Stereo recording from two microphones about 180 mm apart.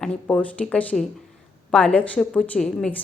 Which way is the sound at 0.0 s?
5° left (ahead or behind).